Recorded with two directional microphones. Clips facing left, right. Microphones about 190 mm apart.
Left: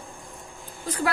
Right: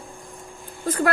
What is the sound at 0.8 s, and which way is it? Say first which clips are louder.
Speech: right 5 dB; 50° right (ahead or behind).